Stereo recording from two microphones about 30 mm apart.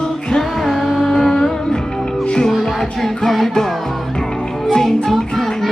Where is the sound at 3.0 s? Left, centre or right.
Centre.